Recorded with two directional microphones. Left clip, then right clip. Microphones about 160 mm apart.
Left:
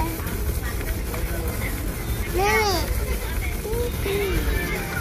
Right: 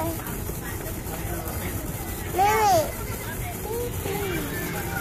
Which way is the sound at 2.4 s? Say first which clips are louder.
Right 2 dB; 35° right (ahead or behind).